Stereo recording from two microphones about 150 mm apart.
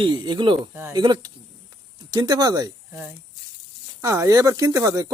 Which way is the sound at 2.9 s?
15° right (ahead or behind).